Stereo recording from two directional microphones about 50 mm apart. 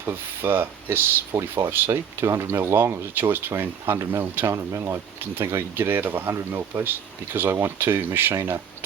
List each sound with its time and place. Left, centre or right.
0.0 s speech: right
1.4 s speech: right
3.9 s speech: right
4.5 s speech: right
5.2 s speech: right